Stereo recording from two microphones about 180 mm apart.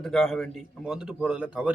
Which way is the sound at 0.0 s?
Centre (ahead or behind).